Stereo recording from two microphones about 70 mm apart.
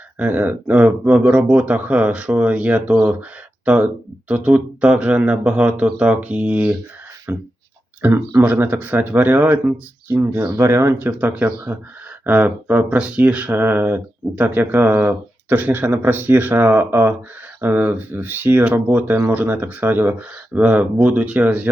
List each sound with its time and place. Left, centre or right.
0.2 s speech: right
4.3 s speech: right
7.3 s speech: right
13.5 s speech: right